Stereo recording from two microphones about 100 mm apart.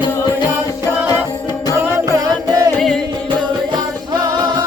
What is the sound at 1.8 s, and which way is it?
Music, 25° right (ahead or behind).